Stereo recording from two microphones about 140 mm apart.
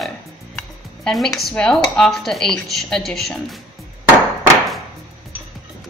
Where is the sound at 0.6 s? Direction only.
5° left (ahead or behind).